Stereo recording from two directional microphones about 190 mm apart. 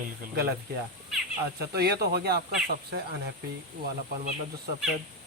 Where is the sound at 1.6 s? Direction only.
55° right (ahead or behind).